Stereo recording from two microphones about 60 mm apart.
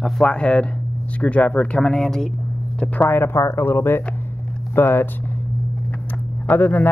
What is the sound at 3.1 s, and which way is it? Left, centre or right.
Speech, left.